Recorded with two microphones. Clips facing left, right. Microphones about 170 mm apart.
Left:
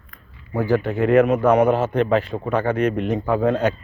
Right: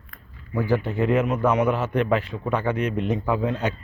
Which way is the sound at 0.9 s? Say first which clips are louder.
Left 6 dB; 60° left (ahead or behind).